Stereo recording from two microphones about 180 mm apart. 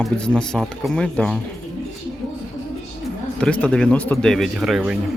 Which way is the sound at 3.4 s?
5° left (ahead or behind).